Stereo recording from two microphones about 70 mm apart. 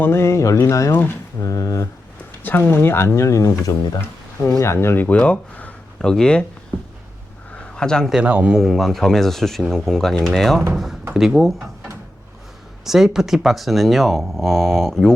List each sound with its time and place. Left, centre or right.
0.0 s speech: left
0.9 s speech: left
1.4 s speech: left
2.4 s speech: left
5.0 s speech: centre
6.0 s speech: centre
7.5 s a sound: centre
8.3 s a man's voice: right
8.5 s speech: centre
11.1 s speech: centre
12.8 s speech: centre